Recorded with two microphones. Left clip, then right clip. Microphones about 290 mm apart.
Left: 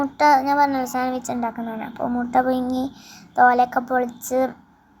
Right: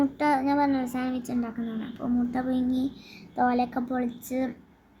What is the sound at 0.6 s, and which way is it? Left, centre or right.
Speech, left.